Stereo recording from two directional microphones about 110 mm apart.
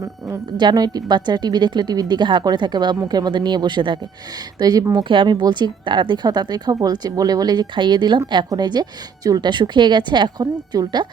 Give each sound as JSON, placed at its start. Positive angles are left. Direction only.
{"t": 0.0, "sound": "a woman's voice", "side_deg": -35}